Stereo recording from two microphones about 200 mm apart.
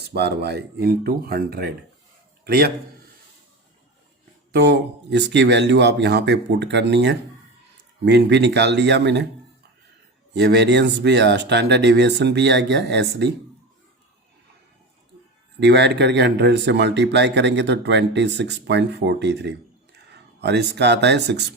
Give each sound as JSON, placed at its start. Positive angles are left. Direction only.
{"t": 0.0, "sound": "a man's voice", "side_deg": -55}
{"t": 4.5, "sound": "speech", "side_deg": -55}
{"t": 10.3, "sound": "speech", "side_deg": -60}
{"t": 15.6, "sound": "speech", "side_deg": -60}